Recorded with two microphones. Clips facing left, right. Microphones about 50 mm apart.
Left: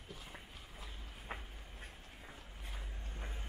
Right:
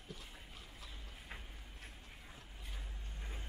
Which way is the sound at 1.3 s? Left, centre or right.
Left.